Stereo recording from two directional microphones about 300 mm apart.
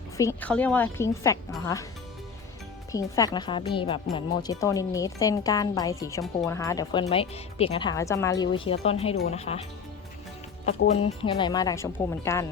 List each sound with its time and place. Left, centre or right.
0.2 s a woman's voice: centre
2.9 s a woman's voice: centre
10.7 s a woman's voice: centre